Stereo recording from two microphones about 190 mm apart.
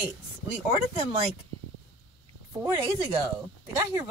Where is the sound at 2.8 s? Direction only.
20° right (ahead or behind).